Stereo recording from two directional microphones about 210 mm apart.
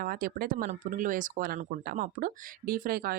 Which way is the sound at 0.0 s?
45° right (ahead or behind).